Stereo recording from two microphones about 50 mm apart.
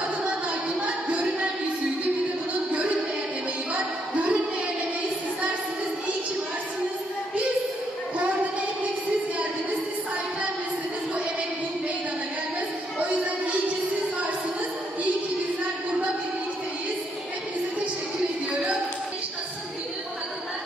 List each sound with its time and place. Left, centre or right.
1.0 s music: right
4.1 s music: right